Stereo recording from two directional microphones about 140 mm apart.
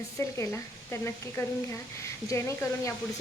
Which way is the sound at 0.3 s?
20° left (ahead or behind).